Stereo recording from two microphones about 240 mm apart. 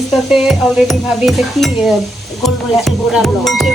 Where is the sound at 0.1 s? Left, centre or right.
Centre.